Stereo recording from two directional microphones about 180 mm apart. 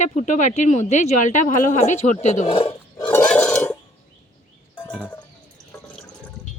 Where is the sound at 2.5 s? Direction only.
30° left (ahead or behind).